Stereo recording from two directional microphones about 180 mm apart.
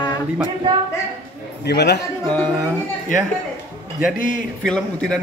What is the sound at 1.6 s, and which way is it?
Speech, 65° left (ahead or behind).